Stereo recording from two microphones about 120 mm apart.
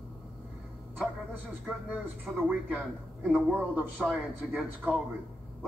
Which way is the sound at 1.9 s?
10° right (ahead or behind).